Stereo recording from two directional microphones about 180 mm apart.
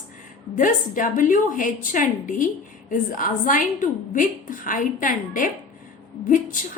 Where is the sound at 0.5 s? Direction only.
45° left (ahead or behind).